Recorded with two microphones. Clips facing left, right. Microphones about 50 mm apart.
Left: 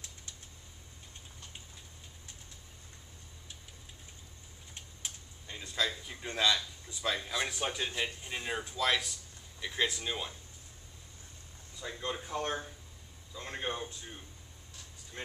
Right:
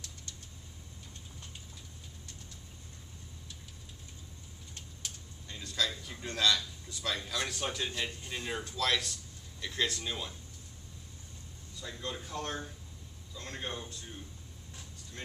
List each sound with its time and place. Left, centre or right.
0.0 s vehicle: centre
4.7 s typing: centre
6.3 s a man's voice: centre
11.8 s speech: left
15.2 s speech: centre